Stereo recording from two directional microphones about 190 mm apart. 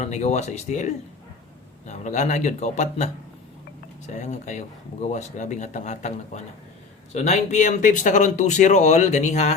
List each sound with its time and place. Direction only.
0.0 s speech: 35° left (ahead or behind)